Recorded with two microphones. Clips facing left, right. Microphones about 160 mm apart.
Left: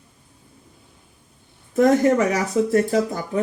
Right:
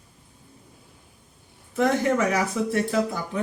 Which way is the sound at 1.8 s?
45° left (ahead or behind).